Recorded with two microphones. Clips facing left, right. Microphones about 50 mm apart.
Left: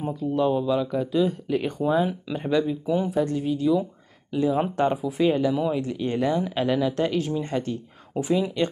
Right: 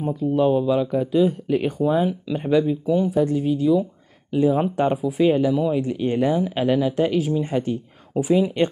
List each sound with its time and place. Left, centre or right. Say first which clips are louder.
0.1 s speech: right 4 dB; centre
2.9 s speech: right 4 dB; centre
4.3 s speech: right 5 dB; centre
4.6 s speech: right 2 dB; centre
5.8 s speech: right 4 dB; centre